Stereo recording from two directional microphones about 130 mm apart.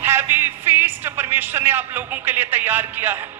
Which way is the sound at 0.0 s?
15° right (ahead or behind).